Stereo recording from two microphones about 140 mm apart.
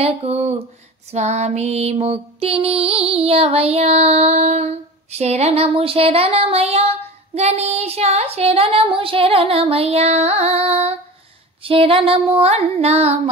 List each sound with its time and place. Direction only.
0.0 s music: 50° right (ahead or behind)